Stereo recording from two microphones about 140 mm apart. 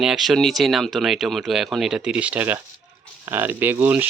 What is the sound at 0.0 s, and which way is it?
Speech, 5° right (ahead or behind).